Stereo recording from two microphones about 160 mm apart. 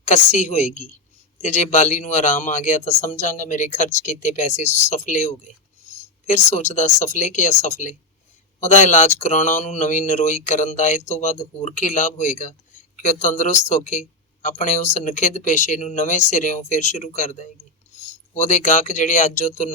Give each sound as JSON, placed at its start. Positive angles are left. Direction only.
{"t": 0.0, "sound": "speech", "side_deg": 50}